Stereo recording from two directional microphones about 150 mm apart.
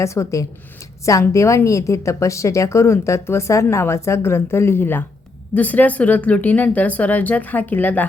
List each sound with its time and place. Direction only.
0.0 s a woman's voice: 20° left (ahead or behind)